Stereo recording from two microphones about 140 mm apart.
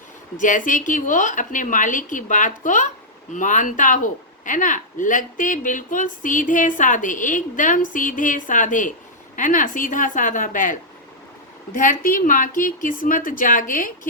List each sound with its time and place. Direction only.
0.3 s speech: 70° left (ahead or behind)
11.8 s speech: 75° left (ahead or behind)